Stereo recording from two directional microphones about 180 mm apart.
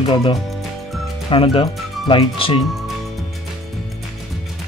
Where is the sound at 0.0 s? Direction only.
30° left (ahead or behind).